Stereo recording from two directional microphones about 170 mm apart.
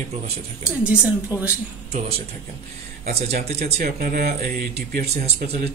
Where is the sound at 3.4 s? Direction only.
40° right (ahead or behind).